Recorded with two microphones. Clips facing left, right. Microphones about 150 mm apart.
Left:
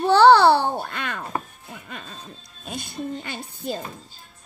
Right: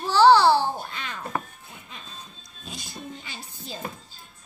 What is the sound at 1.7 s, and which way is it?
Music, 60° left (ahead or behind).